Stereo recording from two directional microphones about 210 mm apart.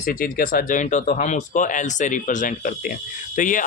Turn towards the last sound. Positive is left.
turn(degrees=40)  # may be behind; listen again after turning